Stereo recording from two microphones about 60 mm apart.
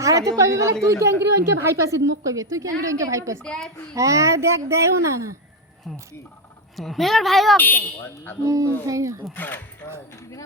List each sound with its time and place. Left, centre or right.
0.0 s a woman's voice: right
3.4 s speech: centre
3.9 s a woman's voice: right
6.7 s speech: centre
7.5 s speech: left
8.0 s speech: left
8.4 s speech: right
9.3 s speech: left